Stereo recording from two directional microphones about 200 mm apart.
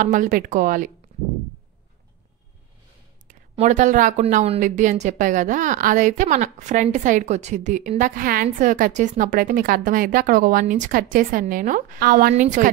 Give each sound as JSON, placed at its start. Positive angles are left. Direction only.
{"t": 0.0, "sound": "speech", "side_deg": -40}
{"t": 3.3, "sound": "speech", "side_deg": -35}